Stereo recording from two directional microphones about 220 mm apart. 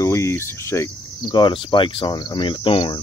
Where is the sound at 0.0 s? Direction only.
15° left (ahead or behind).